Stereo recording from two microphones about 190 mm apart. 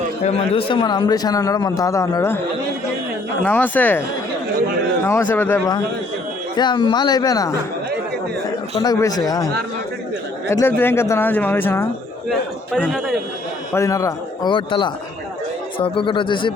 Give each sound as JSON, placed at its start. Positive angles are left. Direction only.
{"t": 0.5, "sound": "a man's voice", "side_deg": 25}
{"t": 3.4, "sound": "speech", "side_deg": 10}
{"t": 5.0, "sound": "a man's voice", "side_deg": 10}
{"t": 8.8, "sound": "a man's voice", "side_deg": 20}
{"t": 10.5, "sound": "speech", "side_deg": 10}
{"t": 12.3, "sound": "a man's voice", "side_deg": 0}
{"t": 13.7, "sound": "a man's voice", "side_deg": 15}